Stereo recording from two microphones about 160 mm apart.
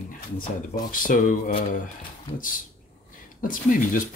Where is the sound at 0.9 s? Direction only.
60° left (ahead or behind).